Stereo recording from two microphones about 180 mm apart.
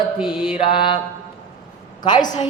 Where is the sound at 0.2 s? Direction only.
30° left (ahead or behind).